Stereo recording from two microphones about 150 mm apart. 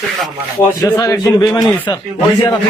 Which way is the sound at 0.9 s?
20° left (ahead or behind).